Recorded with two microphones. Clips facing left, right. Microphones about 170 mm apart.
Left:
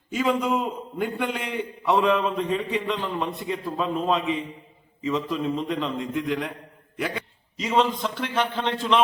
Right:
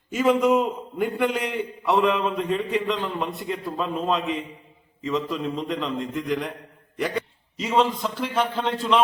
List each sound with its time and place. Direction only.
0.1 s a man's voice: 5° right (ahead or behind)
7.6 s a man's voice: 5° right (ahead or behind)